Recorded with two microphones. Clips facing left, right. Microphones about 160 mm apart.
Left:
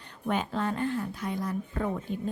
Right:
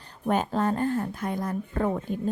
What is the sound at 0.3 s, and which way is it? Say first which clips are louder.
Speech: right 4 dB; 40° right (ahead or behind).